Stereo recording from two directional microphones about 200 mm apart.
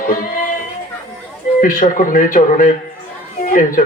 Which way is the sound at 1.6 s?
40° left (ahead or behind).